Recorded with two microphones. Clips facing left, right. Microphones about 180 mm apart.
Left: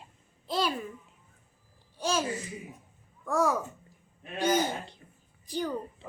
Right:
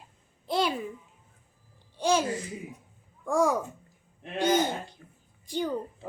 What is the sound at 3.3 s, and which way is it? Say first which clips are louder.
Speech: right 2 dB; 15° right (ahead or behind).